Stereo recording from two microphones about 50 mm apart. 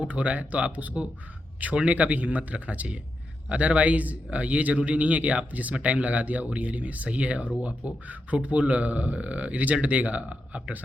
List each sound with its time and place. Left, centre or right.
0.0 s a man's voice: right